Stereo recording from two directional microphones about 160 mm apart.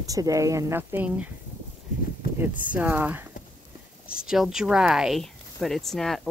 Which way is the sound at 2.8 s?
10° right (ahead or behind).